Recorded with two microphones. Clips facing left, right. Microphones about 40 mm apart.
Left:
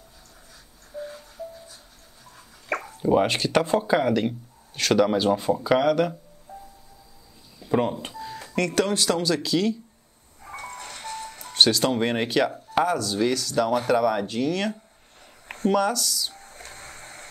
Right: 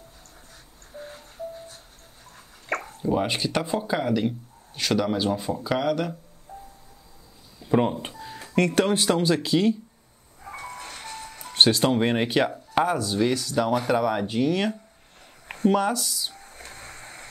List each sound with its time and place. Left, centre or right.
0.9 s music: right
3.0 s speech: centre
3.3 s speech: centre
7.7 s speech: centre
8.2 s a sound: centre
8.5 s speech: centre
11.5 s speech: centre
15.4 s a sound: centre
15.7 s speech: centre
16.3 s a sound: centre